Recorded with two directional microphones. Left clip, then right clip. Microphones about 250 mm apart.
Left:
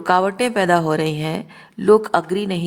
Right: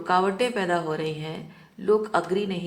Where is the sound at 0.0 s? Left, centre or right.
Left.